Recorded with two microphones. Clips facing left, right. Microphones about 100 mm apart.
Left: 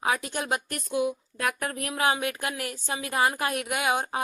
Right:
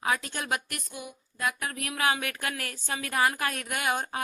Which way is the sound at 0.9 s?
90° left.